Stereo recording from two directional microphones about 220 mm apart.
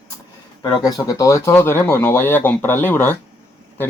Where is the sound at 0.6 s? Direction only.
15° left (ahead or behind).